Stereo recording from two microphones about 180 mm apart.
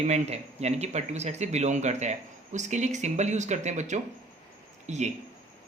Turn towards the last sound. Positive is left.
turn(degrees=-40)  # may be behind; listen again after turning